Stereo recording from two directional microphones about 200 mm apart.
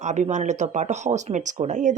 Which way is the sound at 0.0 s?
35° right (ahead or behind).